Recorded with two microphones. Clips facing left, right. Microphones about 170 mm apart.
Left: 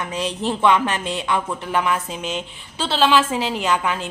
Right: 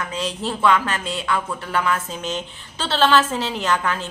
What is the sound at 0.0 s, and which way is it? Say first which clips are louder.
A woman's voice: left 2 dB; 20° left (ahead or behind).